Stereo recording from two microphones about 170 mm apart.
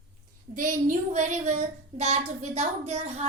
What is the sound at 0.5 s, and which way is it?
A child's voice, 50° right (ahead or behind).